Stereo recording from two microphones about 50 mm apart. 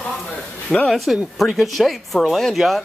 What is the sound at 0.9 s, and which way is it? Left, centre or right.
Speech, centre.